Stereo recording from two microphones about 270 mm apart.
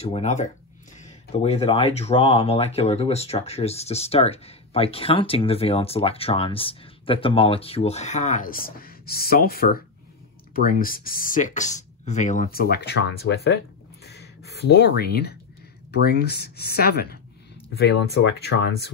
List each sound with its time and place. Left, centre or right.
0.0 s speech: left